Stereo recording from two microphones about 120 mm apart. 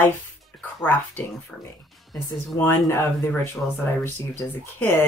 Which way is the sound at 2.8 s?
20° left (ahead or behind).